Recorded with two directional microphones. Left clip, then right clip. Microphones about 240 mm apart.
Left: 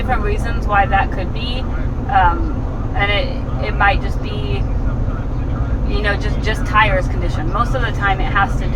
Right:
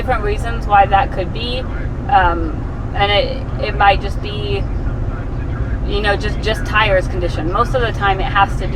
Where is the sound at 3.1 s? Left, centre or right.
Right.